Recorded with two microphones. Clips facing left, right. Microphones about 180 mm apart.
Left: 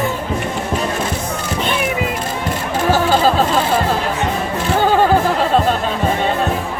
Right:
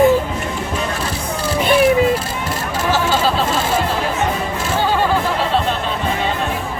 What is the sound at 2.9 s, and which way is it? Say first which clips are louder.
Music: left 3 dB; 45° left (ahead or behind).